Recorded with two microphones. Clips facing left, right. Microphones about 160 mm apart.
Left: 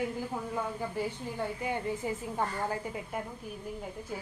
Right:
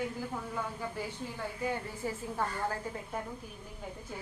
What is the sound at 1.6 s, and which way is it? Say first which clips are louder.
A woman's voice: even; 15° left (ahead or behind).